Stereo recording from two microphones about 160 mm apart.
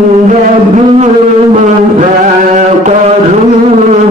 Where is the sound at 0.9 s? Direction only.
45° right (ahead or behind).